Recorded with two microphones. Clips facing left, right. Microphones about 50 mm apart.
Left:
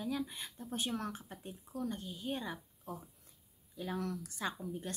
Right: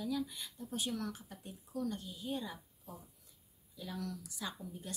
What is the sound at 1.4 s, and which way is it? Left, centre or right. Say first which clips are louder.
A woman's voice: right 1 dB; left.